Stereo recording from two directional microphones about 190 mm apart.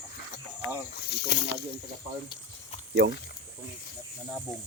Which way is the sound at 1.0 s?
60° left (ahead or behind).